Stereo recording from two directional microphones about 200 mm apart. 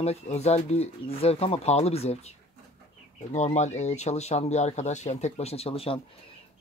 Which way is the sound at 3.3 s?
35° left (ahead or behind).